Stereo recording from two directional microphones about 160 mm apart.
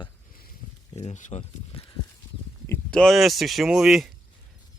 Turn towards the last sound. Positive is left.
turn(degrees=0)  # may be behind; listen again after turning